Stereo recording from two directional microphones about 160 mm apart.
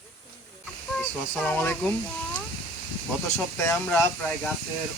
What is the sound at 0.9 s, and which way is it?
Speech, 5° left (ahead or behind).